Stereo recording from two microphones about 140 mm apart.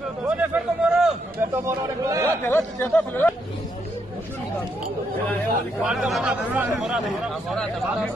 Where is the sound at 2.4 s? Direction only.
15° left (ahead or behind).